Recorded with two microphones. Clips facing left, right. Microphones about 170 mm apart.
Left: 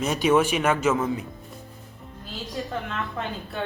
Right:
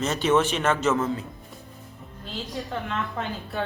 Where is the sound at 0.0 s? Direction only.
10° left (ahead or behind).